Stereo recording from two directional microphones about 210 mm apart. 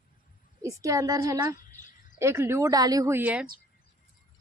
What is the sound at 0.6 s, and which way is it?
A woman's voice, 15° right (ahead or behind).